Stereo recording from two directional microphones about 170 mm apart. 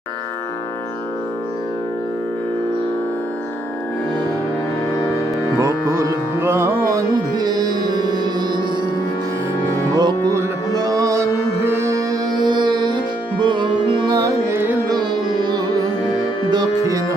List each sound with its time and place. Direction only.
5.6 s music: 15° right (ahead or behind)
9.9 s music: 25° right (ahead or behind)
14.9 s music: 25° right (ahead or behind)